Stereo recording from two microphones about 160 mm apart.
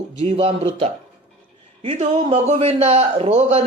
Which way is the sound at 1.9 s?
45° right (ahead or behind).